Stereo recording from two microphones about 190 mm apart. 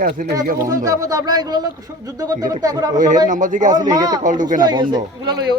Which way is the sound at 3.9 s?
20° right (ahead or behind).